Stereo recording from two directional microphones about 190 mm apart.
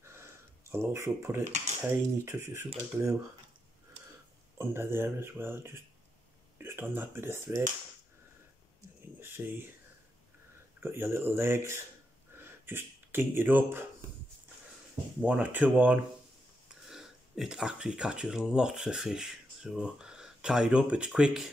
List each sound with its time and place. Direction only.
0.0 s a sound: 15° right (ahead or behind)
1.8 s speech: 15° right (ahead or behind)
4.6 s speech: 10° right (ahead or behind)
9.2 s speech: 10° right (ahead or behind)
10.8 s speech: 10° right (ahead or behind)
15.2 s speech: 5° right (ahead or behind)